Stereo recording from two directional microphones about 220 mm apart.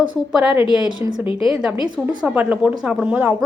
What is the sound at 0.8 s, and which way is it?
Speech, 20° right (ahead or behind).